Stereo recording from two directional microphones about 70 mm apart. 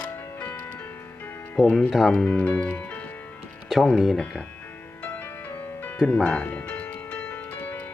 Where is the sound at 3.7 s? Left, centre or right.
Centre.